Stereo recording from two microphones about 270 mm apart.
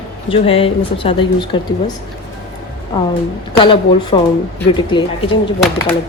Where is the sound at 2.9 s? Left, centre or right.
Centre.